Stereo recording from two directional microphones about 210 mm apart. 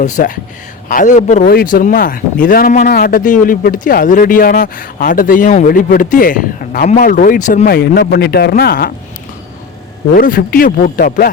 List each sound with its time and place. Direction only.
0.0 s speech: 40° left (ahead or behind)
10.2 s a man's voice: 40° left (ahead or behind)